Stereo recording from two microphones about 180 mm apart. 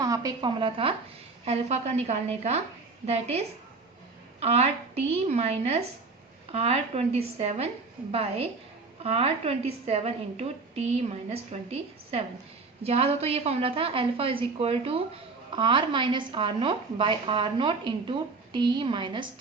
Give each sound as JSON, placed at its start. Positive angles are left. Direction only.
{"t": 0.0, "sound": "a woman's voice", "side_deg": -20}